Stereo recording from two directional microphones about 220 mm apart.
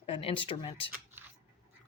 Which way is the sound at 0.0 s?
25° left (ahead or behind).